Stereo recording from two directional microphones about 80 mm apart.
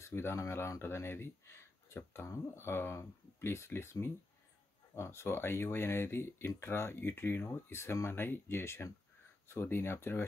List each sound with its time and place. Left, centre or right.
0.0 s speech: left